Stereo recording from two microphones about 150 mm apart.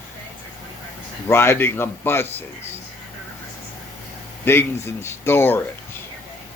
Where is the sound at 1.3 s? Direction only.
15° left (ahead or behind).